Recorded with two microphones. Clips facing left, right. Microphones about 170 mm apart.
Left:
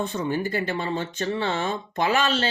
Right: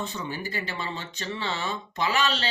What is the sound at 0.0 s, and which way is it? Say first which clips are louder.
Speech: left 7 dB; 50° left (ahead or behind).